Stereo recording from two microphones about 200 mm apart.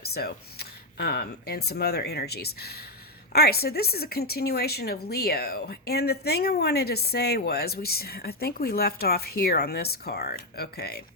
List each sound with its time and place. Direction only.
0.0 s speech: 50° left (ahead or behind)